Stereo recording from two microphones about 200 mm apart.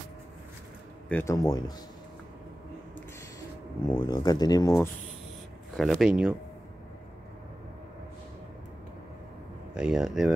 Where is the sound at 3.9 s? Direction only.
20° left (ahead or behind).